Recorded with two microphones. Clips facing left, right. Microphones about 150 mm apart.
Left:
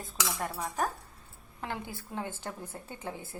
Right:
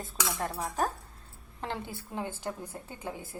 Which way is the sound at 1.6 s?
25° right (ahead or behind).